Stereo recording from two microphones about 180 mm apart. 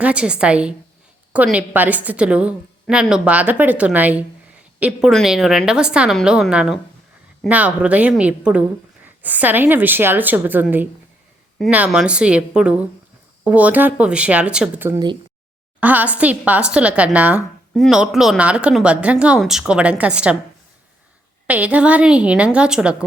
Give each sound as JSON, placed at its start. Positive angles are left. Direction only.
{"t": 0.0, "sound": "a woman's voice", "side_deg": -5}
{"t": 14.9, "sound": "speech", "side_deg": -25}
{"t": 15.8, "sound": "a woman's voice", "side_deg": -10}
{"t": 21.4, "sound": "a woman's voice", "side_deg": -10}